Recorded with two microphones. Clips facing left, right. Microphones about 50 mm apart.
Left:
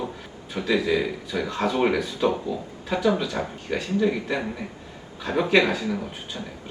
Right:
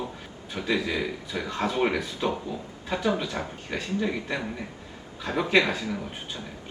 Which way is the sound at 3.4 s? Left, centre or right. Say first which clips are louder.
Left 4 dB; centre.